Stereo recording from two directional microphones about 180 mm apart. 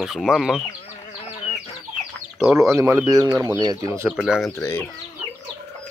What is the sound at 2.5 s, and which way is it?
Speech, 15° right (ahead or behind).